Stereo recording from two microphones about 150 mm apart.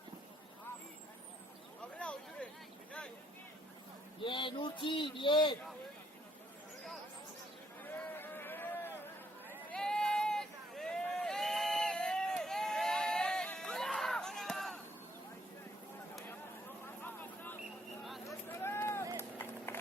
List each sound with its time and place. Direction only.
2.0 s a sound: 10° left (ahead or behind)
4.2 s speech: 35° left (ahead or behind)
7.9 s a sound: 15° left (ahead or behind)
9.5 s run: 5° left (ahead or behind)
16.8 s vehicle: 15° left (ahead or behind)
18.3 s run: 15° left (ahead or behind)